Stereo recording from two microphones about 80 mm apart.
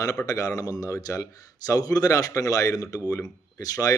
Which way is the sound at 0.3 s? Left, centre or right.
Left.